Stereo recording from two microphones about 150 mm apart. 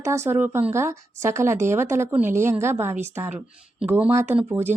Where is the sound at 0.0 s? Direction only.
20° right (ahead or behind).